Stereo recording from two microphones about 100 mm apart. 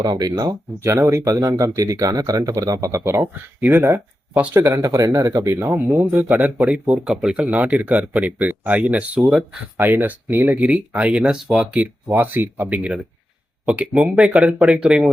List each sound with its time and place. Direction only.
0.0 s speech: 40° right (ahead or behind)
0.8 s speech: 25° right (ahead or behind)
4.6 s speech: 30° right (ahead or behind)
5.5 s speech: 20° right (ahead or behind)